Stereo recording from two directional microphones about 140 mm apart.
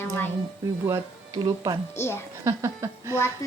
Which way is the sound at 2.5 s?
20° right (ahead or behind).